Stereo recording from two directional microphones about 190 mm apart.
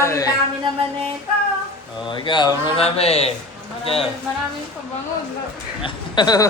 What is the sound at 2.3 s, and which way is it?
A man's voice, 25° left (ahead or behind).